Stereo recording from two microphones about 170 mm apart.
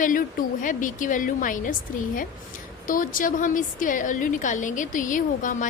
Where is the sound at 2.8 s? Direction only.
55° left (ahead or behind).